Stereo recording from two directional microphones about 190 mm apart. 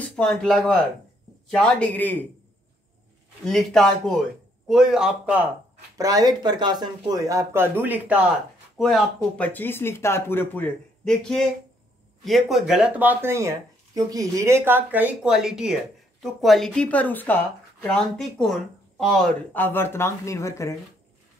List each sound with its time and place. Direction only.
0.1 s speech: 5° left (ahead or behind)
3.4 s speech: 5° left (ahead or behind)
5.9 s speech: 20° right (ahead or behind); by 20.7 s 15° left (ahead or behind)